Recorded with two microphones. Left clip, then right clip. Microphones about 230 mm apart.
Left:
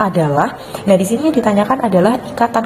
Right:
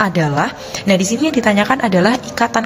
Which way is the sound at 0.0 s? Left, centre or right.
Right.